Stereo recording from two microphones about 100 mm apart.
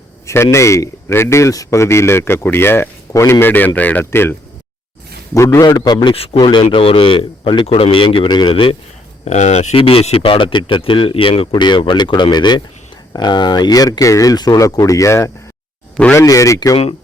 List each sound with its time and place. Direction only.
0.3 s a man's voice: 30° left (ahead or behind)
6.1 s speech: 75° left (ahead or behind)
6.5 s speech: 50° left (ahead or behind)
9.7 s speech: 70° left (ahead or behind); by 16.6 s 35° left (ahead or behind)